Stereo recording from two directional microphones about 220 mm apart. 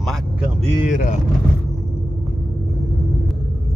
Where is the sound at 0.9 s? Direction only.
35° left (ahead or behind).